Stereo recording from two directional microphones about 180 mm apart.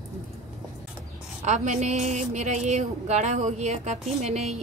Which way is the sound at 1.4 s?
40° right (ahead or behind).